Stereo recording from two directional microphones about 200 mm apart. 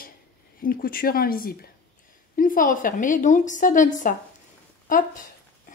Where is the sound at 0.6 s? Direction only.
45° left (ahead or behind).